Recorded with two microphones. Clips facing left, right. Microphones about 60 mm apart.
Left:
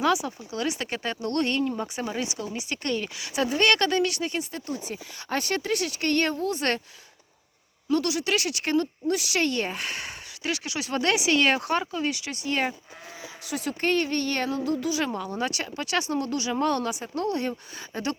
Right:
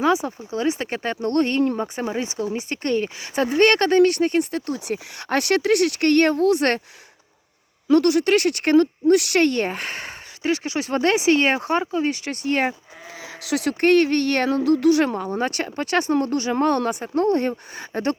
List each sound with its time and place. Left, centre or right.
0.0 s speech: right
8.0 s speech: right
13.4 s speech: right
15.1 s speech: right